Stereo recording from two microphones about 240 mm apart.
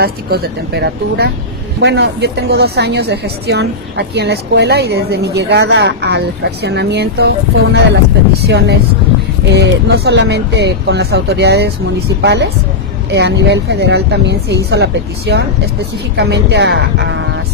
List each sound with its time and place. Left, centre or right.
0.0 s a woman's voice: right